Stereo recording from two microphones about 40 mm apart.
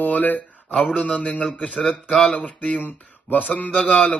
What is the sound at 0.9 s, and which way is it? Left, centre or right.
A man's voice, left.